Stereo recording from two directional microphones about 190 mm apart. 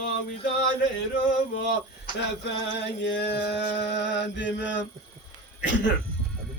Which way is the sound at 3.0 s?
65° left (ahead or behind).